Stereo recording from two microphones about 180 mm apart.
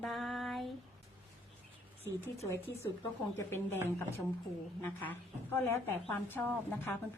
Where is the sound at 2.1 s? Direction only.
15° left (ahead or behind).